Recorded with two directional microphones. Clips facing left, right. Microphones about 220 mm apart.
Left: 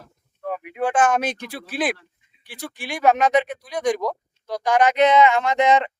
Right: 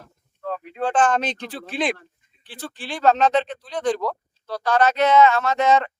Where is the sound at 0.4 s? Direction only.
10° left (ahead or behind).